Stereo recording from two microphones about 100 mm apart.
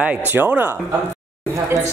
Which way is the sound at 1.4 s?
25° right (ahead or behind).